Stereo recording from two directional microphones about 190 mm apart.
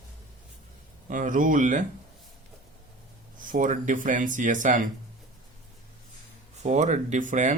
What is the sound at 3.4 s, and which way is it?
Speech, 45° right (ahead or behind).